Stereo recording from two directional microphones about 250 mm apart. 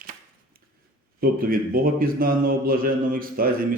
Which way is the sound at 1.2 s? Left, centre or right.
Right.